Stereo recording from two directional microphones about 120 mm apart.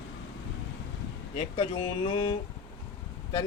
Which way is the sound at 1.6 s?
45° left (ahead or behind).